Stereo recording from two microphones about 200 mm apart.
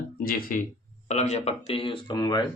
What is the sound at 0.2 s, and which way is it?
Speech, 45° left (ahead or behind).